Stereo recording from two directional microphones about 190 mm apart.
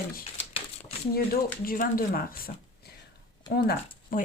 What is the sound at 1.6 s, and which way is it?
Speech, 50° left (ahead or behind).